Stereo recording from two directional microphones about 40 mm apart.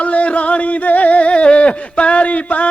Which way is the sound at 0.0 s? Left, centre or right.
Left.